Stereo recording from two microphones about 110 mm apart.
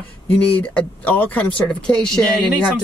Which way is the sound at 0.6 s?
15° left (ahead or behind).